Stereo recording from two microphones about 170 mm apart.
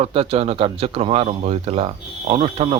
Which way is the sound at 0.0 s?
35° right (ahead or behind).